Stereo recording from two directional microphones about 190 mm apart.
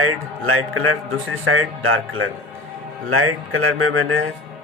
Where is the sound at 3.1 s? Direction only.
90° right.